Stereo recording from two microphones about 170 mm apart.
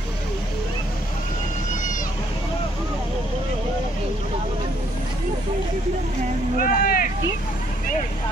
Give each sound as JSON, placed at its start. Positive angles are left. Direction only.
{"t": 6.6, "sound": "vehicle", "side_deg": 55}